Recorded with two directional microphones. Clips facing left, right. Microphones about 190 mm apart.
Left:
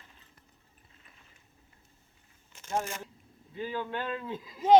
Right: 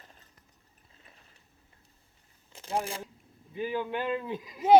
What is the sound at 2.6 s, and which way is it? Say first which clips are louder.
Speech: right 1 dB; 35° right (ahead or behind).